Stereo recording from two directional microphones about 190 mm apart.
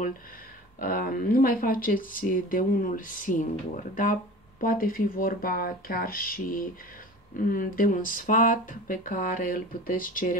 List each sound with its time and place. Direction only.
0.7 s speech: 45° left (ahead or behind)